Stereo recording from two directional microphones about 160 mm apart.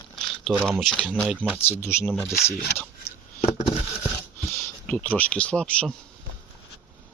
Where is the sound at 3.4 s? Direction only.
40° left (ahead or behind).